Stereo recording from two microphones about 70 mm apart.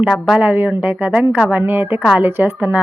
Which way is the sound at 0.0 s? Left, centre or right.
Centre.